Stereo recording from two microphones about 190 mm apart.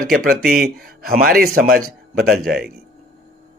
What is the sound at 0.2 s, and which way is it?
A man's voice, 50° right (ahead or behind).